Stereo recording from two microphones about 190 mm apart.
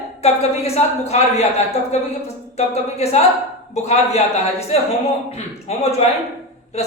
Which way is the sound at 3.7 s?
35° left (ahead or behind).